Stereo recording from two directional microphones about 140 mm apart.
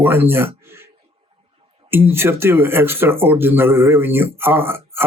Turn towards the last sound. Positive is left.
turn(degrees=-15)  # may be behind; listen again after turning